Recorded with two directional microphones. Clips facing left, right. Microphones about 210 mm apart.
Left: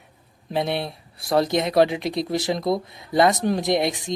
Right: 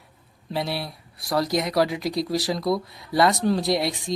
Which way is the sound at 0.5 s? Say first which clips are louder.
Left 4 dB; 20° left (ahead or behind).